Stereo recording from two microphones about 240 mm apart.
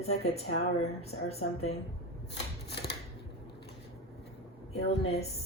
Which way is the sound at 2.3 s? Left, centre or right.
Left.